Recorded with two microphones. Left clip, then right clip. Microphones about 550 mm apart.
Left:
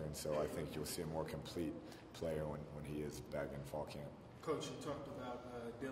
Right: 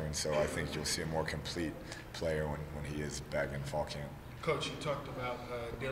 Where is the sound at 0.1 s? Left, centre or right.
Right.